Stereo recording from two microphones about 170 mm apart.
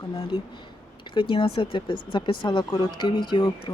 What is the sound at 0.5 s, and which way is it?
Speech, 30° left (ahead or behind).